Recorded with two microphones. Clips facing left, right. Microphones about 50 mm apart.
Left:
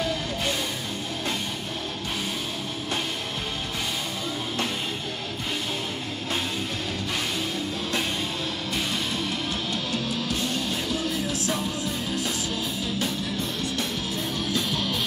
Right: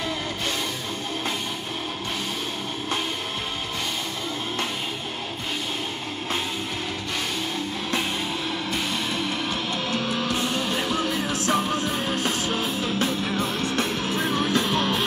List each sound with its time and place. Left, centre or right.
9.9 s music: right